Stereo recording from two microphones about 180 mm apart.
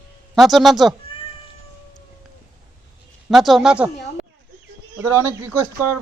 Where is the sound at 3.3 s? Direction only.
Centre (ahead or behind).